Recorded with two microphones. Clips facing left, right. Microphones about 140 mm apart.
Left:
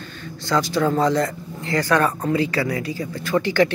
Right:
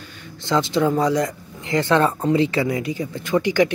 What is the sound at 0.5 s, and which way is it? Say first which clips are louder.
Speech: right 1 dB; 20° right (ahead or behind).